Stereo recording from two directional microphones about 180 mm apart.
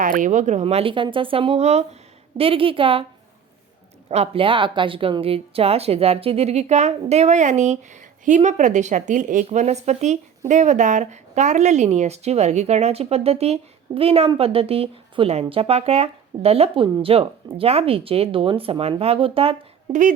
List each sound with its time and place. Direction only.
0.0 s a woman's voice: 45° right (ahead or behind); by 3.1 s 30° right (ahead or behind)
4.1 s speech: 35° right (ahead or behind)